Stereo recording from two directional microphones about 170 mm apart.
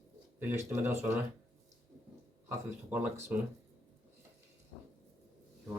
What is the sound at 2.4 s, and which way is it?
Speech, 10° right (ahead or behind).